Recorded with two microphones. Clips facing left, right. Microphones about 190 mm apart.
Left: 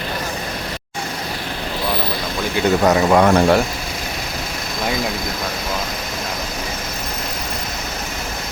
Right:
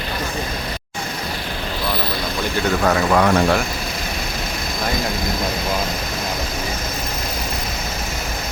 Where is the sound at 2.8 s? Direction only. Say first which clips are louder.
Left 3 dB; 20° left (ahead or behind).